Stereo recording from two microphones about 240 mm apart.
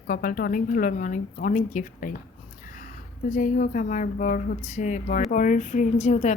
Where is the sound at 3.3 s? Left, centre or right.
Left.